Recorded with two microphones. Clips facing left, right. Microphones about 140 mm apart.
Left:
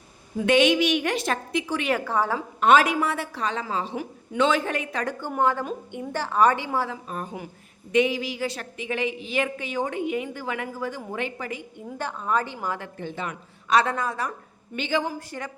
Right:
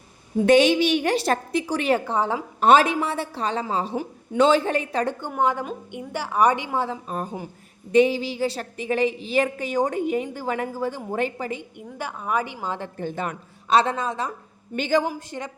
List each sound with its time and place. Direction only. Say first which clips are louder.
0.3 s speech: right 3 dB; 35° right (ahead or behind)
2.0 s a woman's voice: right 1 dB; 20° right (ahead or behind)
2.6 s speech: right 2 dB; 30° right (ahead or behind)
5.4 s a woman's voice: even; 15° right (ahead or behind)
6.7 s a woman's voice: right 2 dB; 30° right (ahead or behind)
11.9 s a woman's voice: even; 10° right (ahead or behind)
12.6 s a woman's voice: right 1 dB; 25° right (ahead or behind)
13.0 s a man's voice: right 4 dB; 45° right (ahead or behind)
13.7 s a woman's voice: right 2 dB; 25° right (ahead or behind)
14.8 s a man's voice: right 4 dB; 45° right (ahead or behind)
15.3 s a woman's voice: right 2 dB; 20° right (ahead or behind)